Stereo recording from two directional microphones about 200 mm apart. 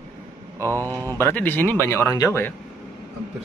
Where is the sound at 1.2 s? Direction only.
10° left (ahead or behind).